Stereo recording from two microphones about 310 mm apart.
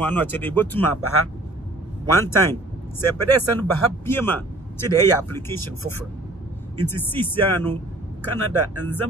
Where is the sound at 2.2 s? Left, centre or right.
Centre.